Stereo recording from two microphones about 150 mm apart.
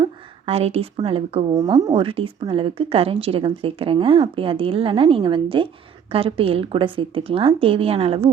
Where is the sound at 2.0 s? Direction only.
35° right (ahead or behind).